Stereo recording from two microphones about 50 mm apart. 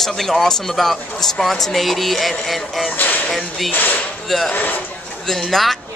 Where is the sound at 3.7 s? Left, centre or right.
Left.